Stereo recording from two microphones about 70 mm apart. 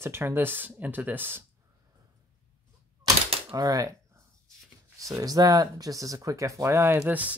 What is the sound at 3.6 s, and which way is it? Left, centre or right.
Speech, right.